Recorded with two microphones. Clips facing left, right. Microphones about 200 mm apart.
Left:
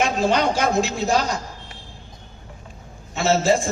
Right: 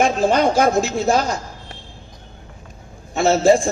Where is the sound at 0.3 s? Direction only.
50° right (ahead or behind).